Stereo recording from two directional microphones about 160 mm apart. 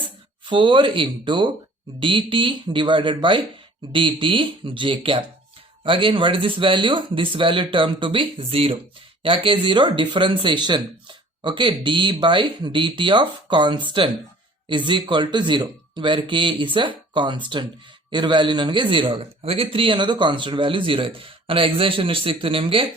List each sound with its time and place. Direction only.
0.4 s speech: 30° right (ahead or behind)